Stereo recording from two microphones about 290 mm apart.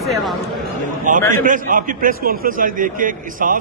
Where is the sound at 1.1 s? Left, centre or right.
Right.